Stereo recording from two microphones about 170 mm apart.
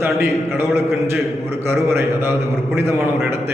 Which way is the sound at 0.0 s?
15° right (ahead or behind).